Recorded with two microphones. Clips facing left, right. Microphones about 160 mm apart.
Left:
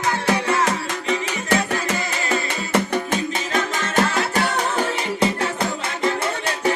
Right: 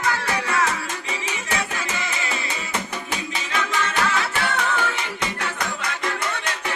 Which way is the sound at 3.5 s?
45° left (ahead or behind).